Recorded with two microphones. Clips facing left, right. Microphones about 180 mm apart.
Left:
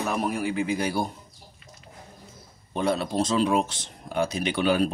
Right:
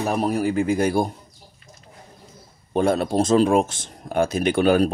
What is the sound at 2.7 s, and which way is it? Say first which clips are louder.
Speech: right 5 dB; 50° right (ahead or behind).